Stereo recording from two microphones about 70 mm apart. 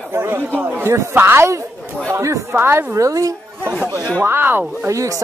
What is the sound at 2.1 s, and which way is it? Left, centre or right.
Speech, right.